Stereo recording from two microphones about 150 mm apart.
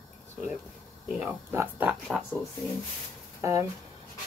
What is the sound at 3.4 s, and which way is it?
Speech, 20° right (ahead or behind).